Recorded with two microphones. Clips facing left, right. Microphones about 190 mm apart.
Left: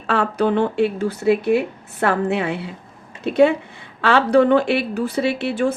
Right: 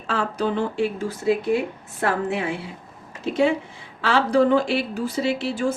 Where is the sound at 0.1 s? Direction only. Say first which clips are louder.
Left 5 dB; 60° left (ahead or behind).